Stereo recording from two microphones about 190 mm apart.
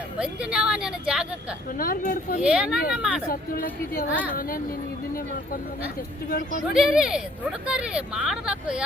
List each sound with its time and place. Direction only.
0.2 s speech: 5° right (ahead or behind)
1.8 s a woman's voice: 45° left (ahead or behind)
2.4 s speech: 5° right (ahead or behind)
3.2 s a woman's voice: 50° left (ahead or behind)
6.7 s speech: 5° right (ahead or behind)